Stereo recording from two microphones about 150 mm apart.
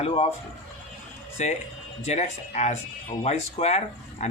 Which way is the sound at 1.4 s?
50° left (ahead or behind).